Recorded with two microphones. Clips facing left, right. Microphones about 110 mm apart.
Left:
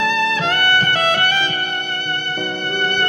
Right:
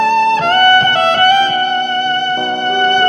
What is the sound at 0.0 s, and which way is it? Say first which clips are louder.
Music: right 8 dB; 50° right (ahead or behind).